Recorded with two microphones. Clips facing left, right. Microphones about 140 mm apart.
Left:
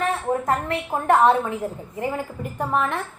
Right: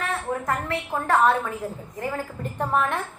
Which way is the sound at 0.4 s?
25° left (ahead or behind).